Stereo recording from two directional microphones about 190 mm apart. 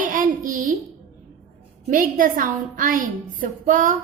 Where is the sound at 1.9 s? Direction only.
45° right (ahead or behind).